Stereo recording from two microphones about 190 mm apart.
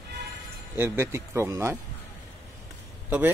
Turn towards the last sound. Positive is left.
turn(degrees=-5)  # may be behind; listen again after turning